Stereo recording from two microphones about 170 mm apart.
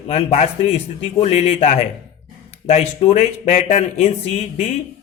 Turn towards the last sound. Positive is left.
turn(degrees=45)  # may be behind; listen again after turning